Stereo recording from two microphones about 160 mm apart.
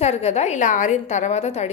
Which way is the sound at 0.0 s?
40° left (ahead or behind).